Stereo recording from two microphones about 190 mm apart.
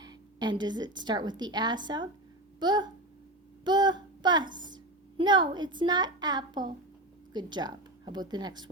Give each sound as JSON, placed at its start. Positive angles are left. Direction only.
{"t": 0.0, "sound": "a woman's voice", "side_deg": -20}